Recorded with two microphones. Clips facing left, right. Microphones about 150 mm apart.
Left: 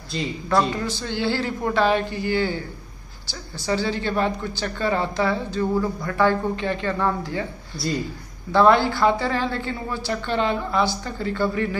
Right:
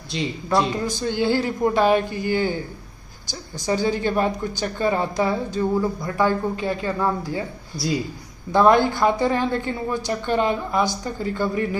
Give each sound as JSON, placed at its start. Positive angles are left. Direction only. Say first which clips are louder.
{"t": 0.1, "sound": "speech", "louder": "even", "side_deg": 0}
{"t": 0.7, "sound": "a woman's voice", "louder": "right 3 dB", "side_deg": -15}
{"t": 7.7, "sound": "speech", "louder": "right 1 dB", "side_deg": -40}
{"t": 8.5, "sound": "a woman's voice", "louder": "right 1 dB", "side_deg": -15}